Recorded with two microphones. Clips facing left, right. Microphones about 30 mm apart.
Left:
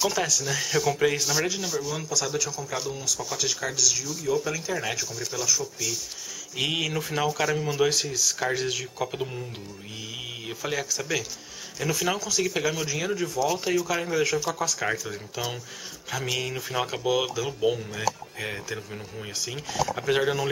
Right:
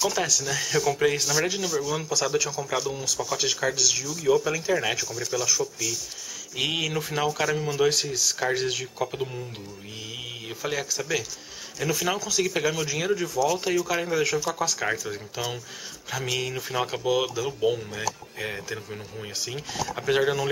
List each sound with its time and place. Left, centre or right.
0.0 s speech: centre
2.0 s speech: centre
8.1 s speech: right
8.5 s speech: centre
9.0 s speech: centre
10.5 s speech: centre
13.3 s speech: centre
19.4 s speech: centre